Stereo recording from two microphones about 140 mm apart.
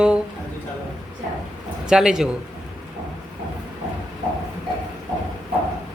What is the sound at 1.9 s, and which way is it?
Speech, 5° right (ahead or behind).